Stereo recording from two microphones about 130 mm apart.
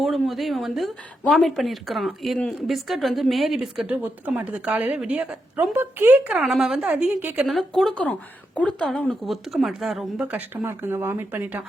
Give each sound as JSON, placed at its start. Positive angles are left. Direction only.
{"t": 0.0, "sound": "a woman's voice", "side_deg": 0}
{"t": 7.4, "sound": "speech", "side_deg": 0}
{"t": 10.3, "sound": "a woman's voice", "side_deg": -15}